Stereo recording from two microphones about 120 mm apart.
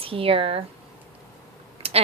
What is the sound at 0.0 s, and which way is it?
Speech, 50° right (ahead or behind).